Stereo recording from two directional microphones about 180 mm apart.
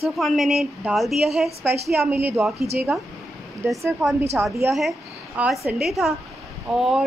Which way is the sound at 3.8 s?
5° right (ahead or behind).